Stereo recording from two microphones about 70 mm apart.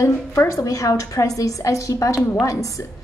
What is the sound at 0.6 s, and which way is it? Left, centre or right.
A woman's voice, left.